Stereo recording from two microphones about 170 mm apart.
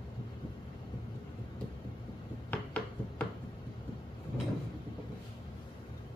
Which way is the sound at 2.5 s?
5° left (ahead or behind).